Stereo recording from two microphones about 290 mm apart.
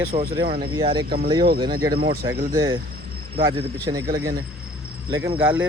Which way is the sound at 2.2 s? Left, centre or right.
Centre.